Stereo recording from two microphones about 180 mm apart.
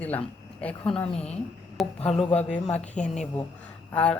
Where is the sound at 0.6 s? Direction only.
5° left (ahead or behind).